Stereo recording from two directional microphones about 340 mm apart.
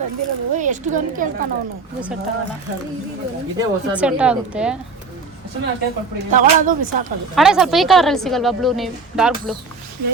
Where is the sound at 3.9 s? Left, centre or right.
Centre.